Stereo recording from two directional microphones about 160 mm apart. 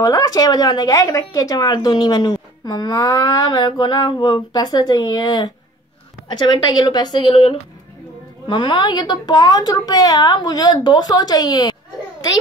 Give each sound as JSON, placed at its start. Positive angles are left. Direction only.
{"t": 0.0, "sound": "speech", "side_deg": 25}